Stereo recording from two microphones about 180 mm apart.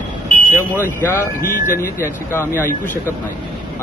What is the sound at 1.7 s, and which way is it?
Speech, 15° left (ahead or behind).